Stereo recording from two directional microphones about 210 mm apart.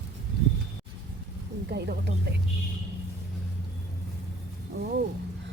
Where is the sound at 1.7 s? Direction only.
50° right (ahead or behind).